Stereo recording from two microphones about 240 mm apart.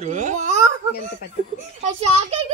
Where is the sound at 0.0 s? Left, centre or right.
Right.